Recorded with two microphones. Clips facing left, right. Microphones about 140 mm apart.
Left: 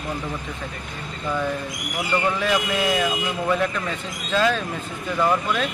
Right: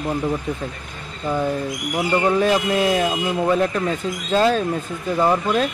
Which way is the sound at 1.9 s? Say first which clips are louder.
Right 5 dB; 30° right (ahead or behind).